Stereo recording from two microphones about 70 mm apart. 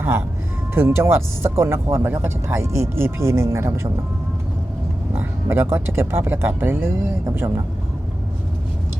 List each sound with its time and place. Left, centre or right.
0.0 s speech: right
5.1 s speech: right